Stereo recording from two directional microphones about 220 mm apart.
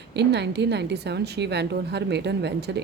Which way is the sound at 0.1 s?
50° right (ahead or behind).